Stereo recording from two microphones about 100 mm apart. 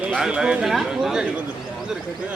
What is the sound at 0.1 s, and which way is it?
Speech, 10° right (ahead or behind).